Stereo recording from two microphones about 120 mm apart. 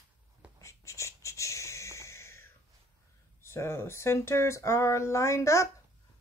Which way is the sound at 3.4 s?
20° left (ahead or behind).